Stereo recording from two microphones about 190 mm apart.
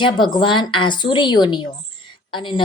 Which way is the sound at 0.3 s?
25° left (ahead or behind).